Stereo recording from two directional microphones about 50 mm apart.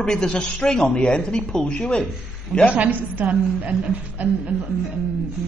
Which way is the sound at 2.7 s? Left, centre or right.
Right.